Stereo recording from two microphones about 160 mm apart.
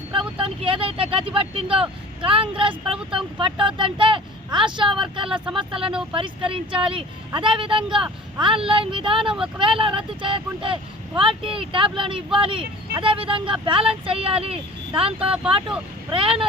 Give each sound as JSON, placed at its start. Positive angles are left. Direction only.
{"t": 0.1, "sound": "speech", "side_deg": -35}
{"t": 5.8, "sound": "speech", "side_deg": -5}
{"t": 6.1, "sound": "speech", "side_deg": -35}